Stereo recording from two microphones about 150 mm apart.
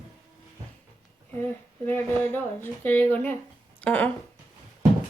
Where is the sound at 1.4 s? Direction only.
15° left (ahead or behind).